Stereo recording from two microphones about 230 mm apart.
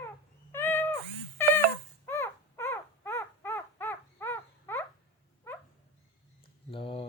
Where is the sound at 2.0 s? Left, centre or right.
Centre.